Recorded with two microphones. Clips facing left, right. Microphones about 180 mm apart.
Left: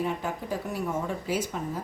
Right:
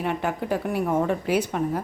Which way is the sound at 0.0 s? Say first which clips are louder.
Right 4 dB; 70° right (ahead or behind).